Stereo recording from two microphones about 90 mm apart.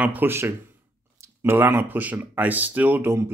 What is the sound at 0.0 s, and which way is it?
Speech, 20° right (ahead or behind).